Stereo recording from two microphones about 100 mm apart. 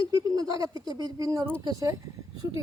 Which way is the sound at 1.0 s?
40° right (ahead or behind).